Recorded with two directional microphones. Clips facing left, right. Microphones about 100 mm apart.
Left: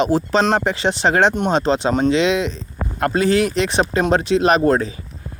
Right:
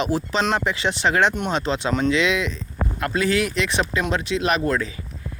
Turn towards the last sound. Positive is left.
turn(degrees=30)  # may be behind; listen again after turning